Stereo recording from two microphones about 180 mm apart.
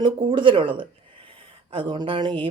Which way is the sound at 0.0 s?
30° right (ahead or behind).